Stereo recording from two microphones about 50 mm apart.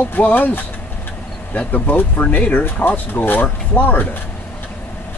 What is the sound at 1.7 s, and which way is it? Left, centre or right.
Speech, left.